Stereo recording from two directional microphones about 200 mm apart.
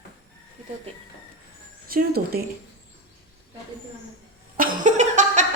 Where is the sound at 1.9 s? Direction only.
50° right (ahead or behind).